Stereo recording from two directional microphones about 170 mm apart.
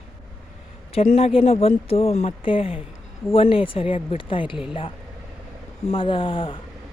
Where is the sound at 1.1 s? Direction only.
35° left (ahead or behind).